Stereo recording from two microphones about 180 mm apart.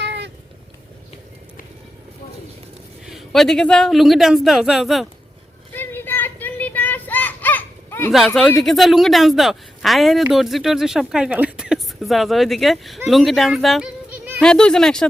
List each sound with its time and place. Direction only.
0.0 s cat: 80° right
3.1 s speech: centre (ahead or behind)
5.7 s a sound: 10° left (ahead or behind)
8.1 s speech: 5° left (ahead or behind)
14.4 s speech: 5° left (ahead or behind)